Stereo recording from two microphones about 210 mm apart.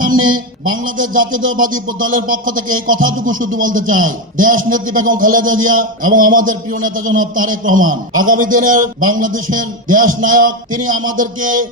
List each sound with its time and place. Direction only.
0.7 s a man's voice: 40° right (ahead or behind)